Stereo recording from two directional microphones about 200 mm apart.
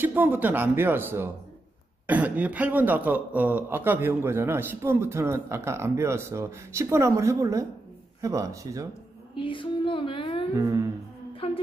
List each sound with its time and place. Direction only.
0.0 s speech: 10° right (ahead or behind)
9.3 s music: 25° left (ahead or behind)
10.5 s speech: 15° right (ahead or behind)
11.3 s music: 30° left (ahead or behind)